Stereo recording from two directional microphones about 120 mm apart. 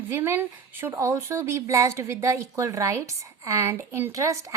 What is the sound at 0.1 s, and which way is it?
Speech, 20° right (ahead or behind).